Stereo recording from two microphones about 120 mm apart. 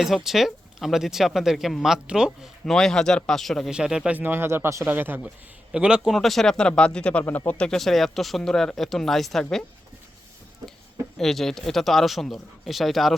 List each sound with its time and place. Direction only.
0.3 s a man's voice: centre (ahead or behind)
11.2 s speech: 5° left (ahead or behind)